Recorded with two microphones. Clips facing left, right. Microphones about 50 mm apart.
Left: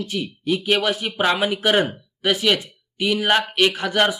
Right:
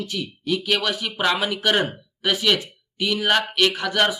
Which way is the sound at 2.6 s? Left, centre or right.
Centre.